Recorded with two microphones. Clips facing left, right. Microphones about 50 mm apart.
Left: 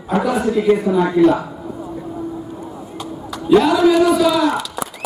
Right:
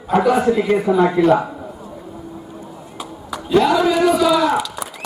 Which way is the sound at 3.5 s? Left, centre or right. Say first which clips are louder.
Left 3 dB; centre.